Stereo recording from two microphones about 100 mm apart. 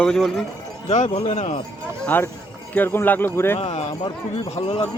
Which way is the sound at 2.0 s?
20° left (ahead or behind).